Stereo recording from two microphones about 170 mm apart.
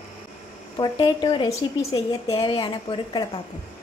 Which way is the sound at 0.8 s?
30° left (ahead or behind).